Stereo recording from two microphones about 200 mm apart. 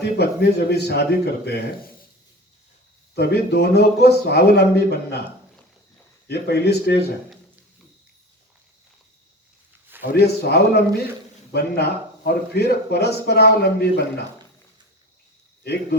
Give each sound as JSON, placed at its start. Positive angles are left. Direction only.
{"t": 0.0, "sound": "a man's voice", "side_deg": 55}
{"t": 3.2, "sound": "a man's voice", "side_deg": 55}
{"t": 6.2, "sound": "a man's voice", "side_deg": 55}
{"t": 10.2, "sound": "a man's voice", "side_deg": 55}
{"t": 15.6, "sound": "a man's voice", "side_deg": 55}